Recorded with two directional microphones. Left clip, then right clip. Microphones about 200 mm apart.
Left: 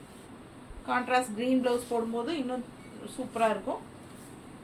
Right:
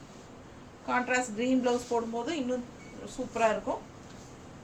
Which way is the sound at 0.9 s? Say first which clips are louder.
Left 1 dB; 15° right (ahead or behind).